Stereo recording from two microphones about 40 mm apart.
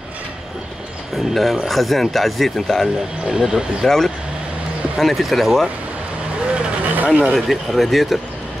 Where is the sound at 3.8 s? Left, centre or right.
Centre.